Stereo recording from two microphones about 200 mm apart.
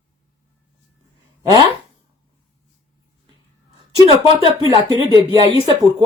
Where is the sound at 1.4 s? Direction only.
20° right (ahead or behind).